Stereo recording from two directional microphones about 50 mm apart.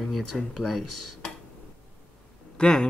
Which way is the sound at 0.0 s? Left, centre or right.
Centre.